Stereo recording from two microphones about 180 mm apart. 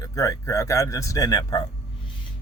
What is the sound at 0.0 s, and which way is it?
A man's voice, 20° left (ahead or behind).